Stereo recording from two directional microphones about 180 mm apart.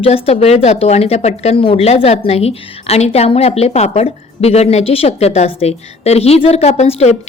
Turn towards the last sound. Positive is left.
turn(degrees=35)  # may be behind; listen again after turning